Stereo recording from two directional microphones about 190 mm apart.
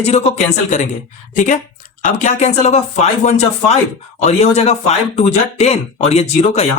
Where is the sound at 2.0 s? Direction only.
40° left (ahead or behind).